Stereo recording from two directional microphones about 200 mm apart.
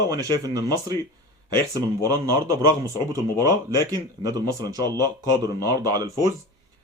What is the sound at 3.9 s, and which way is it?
A man's voice, 20° right (ahead or behind).